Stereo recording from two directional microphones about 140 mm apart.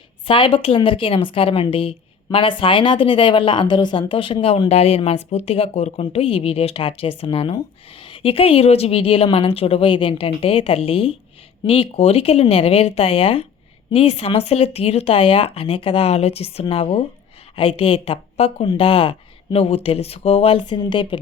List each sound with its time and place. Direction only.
0.3 s a woman's voice: 40° left (ahead or behind)